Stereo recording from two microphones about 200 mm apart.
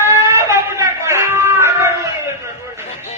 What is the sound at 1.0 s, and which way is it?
Music, 15° right (ahead or behind).